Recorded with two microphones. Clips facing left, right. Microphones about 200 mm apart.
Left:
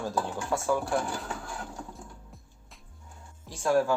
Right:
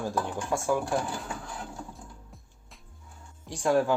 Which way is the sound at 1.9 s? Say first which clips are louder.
Left 1 dB; centre (ahead or behind).